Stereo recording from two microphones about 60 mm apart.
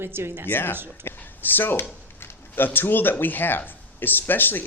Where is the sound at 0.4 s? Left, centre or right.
Left.